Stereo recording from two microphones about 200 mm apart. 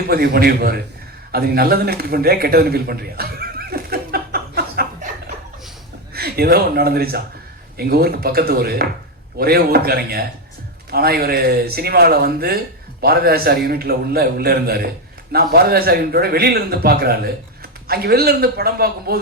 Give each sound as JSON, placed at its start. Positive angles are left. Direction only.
{"t": 0.1, "sound": "a man's voice", "side_deg": -50}
{"t": 6.1, "sound": "a man's voice", "side_deg": -50}